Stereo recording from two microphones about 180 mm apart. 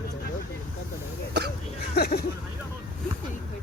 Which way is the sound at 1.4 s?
65° right (ahead or behind).